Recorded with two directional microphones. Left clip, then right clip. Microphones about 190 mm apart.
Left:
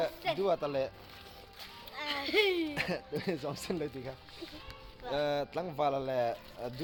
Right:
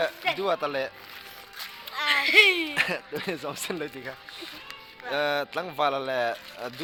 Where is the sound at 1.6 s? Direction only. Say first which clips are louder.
Right 10 dB; 5° left (ahead or behind).